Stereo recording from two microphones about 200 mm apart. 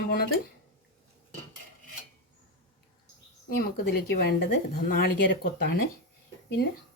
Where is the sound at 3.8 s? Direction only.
55° left (ahead or behind).